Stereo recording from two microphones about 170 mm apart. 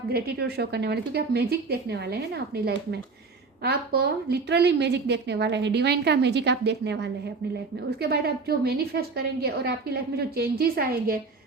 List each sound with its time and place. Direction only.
0.1 s a woman's voice: 70° right (ahead or behind); by 7.1 s 90° right
7.9 s a woman's voice: 70° right (ahead or behind)